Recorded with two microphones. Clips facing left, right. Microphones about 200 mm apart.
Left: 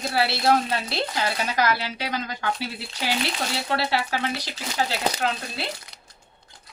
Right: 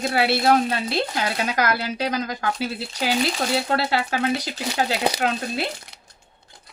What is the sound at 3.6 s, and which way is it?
Speech, 50° right (ahead or behind).